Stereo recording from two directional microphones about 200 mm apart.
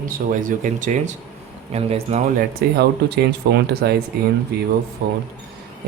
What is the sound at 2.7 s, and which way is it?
Speech, 55° right (ahead or behind).